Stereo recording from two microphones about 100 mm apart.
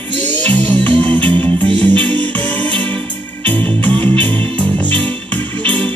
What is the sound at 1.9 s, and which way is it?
Music, 55° right (ahead or behind).